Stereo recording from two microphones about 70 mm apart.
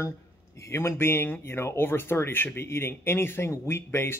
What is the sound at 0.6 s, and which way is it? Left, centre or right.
Speech, left.